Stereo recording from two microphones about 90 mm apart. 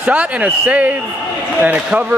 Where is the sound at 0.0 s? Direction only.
15° right (ahead or behind).